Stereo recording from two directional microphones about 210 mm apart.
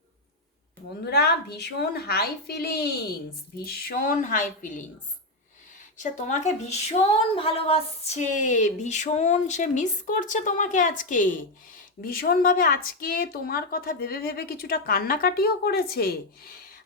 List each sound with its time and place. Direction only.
1.1 s a woman's voice: 50° left (ahead or behind)
6.0 s a woman's voice: 35° left (ahead or behind)